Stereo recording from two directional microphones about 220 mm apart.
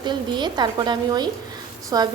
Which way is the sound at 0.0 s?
20° right (ahead or behind).